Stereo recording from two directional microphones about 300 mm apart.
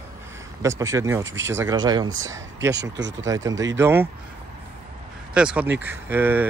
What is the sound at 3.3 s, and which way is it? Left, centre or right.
Speech, centre.